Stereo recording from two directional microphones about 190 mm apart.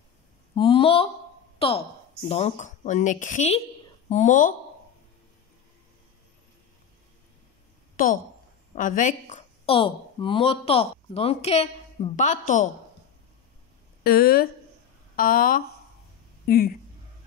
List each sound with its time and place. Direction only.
0.6 s a woman's voice: 30° left (ahead or behind)
7.9 s a sound: 45° left (ahead or behind)
8.7 s speech: 45° left (ahead or behind)
9.7 s speech: 30° left (ahead or behind)
14.0 s speech: 55° left (ahead or behind)